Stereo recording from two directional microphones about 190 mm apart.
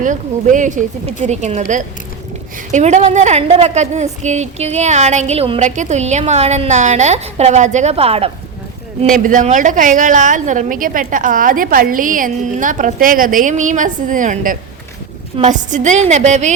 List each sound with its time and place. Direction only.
0.0 s a woman's voice: 40° right (ahead or behind)
9.1 s a woman's voice: 45° right (ahead or behind)